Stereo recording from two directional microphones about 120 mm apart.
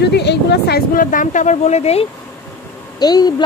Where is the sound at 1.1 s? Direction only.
90° left; by 2.0 s 60° left (ahead or behind).